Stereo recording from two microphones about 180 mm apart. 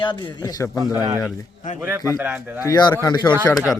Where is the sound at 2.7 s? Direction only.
20° left (ahead or behind).